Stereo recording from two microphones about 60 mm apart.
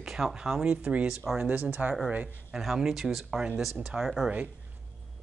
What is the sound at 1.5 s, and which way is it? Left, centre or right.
Speech, right.